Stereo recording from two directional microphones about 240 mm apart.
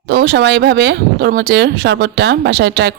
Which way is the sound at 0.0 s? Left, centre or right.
Right.